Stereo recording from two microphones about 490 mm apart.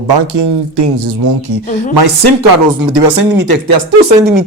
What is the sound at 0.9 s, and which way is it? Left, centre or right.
Speech, right.